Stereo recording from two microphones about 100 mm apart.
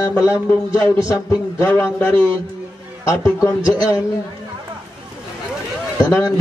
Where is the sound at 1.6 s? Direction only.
25° left (ahead or behind).